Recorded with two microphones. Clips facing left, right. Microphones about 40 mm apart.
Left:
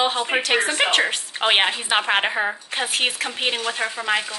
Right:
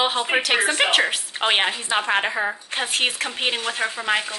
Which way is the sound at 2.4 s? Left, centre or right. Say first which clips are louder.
Left 1 dB; centre.